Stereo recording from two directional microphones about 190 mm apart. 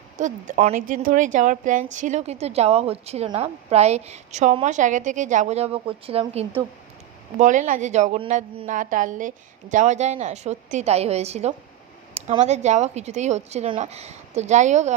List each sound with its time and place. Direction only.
0.2 s a woman's voice: 40° right (ahead or behind)
7.3 s a woman's voice: 40° right (ahead or behind)